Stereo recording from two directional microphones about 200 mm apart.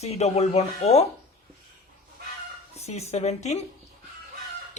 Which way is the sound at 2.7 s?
30° left (ahead or behind).